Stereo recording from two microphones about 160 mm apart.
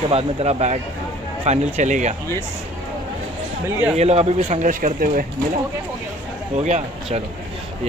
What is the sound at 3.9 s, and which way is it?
Speech, 40° right (ahead or behind).